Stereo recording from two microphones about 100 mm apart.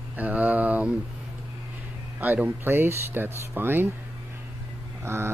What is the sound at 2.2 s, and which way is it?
Speech, 15° right (ahead or behind).